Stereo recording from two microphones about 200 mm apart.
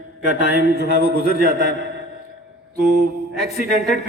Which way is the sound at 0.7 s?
55° left (ahead or behind).